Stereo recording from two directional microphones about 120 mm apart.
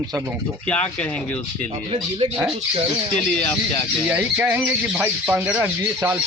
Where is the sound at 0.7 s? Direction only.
10° left (ahead or behind).